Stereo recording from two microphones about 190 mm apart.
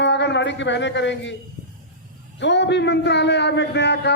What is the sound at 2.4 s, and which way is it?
A man's voice, 65° left (ahead or behind).